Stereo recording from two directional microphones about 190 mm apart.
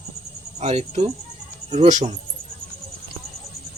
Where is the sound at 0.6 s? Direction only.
35° right (ahead or behind).